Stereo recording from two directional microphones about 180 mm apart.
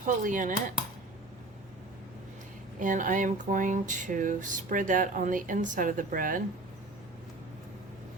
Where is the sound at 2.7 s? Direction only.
45° right (ahead or behind).